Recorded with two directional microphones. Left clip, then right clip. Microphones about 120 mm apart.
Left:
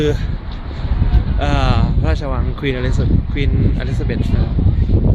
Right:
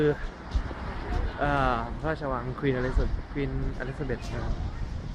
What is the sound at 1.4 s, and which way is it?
Speech, 15° left (ahead or behind).